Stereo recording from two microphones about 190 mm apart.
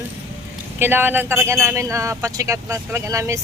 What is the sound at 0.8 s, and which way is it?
Speech, 10° right (ahead or behind).